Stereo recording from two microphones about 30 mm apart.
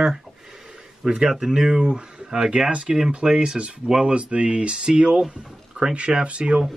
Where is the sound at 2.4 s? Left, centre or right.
Right.